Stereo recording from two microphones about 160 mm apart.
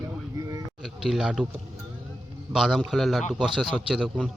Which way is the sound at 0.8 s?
Centre (ahead or behind).